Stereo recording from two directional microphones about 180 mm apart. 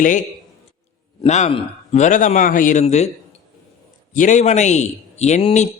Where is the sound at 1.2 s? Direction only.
35° left (ahead or behind).